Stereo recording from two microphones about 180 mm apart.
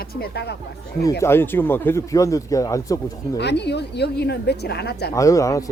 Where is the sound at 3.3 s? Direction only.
70° left (ahead or behind).